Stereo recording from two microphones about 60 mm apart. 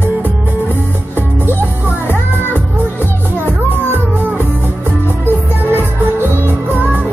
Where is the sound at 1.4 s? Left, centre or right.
Right.